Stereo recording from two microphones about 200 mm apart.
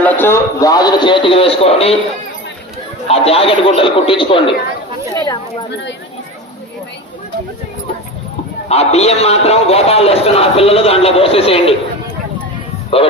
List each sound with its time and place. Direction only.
0.0 s a man's voice: 10° left (ahead or behind); by 2.0 s 30° left (ahead or behind)
3.1 s a man's voice: 30° left (ahead or behind)
8.7 s a man's voice: 30° left (ahead or behind)